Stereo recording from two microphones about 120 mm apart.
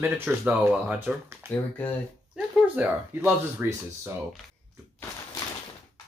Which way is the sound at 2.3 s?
10° right (ahead or behind).